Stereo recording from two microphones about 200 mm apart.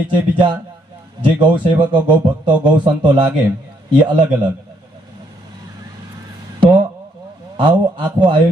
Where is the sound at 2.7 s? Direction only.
25° right (ahead or behind).